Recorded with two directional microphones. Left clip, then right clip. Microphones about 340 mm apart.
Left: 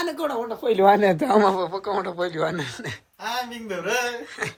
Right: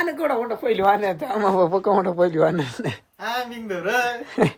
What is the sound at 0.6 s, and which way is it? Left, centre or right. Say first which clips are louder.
Speech: left 3 dB; centre.